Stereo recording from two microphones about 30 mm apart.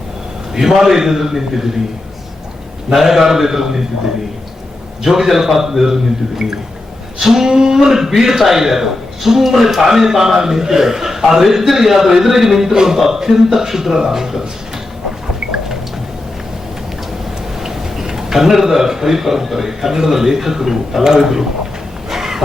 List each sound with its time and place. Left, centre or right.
0.5 s a man's voice: centre
2.9 s a man's voice: centre
5.0 s a man's voice: centre
7.2 s a man's voice: centre
17.6 s a man's voice: centre
22.1 s a sound: centre